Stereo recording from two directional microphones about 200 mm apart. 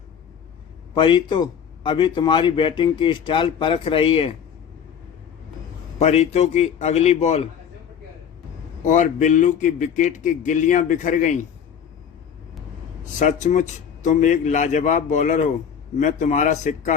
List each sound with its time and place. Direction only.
0.9 s a man's voice: 25° left (ahead or behind)
6.0 s a man's voice: 35° left (ahead or behind)
8.8 s a man's voice: 40° left (ahead or behind)
13.1 s a man's voice: 35° left (ahead or behind)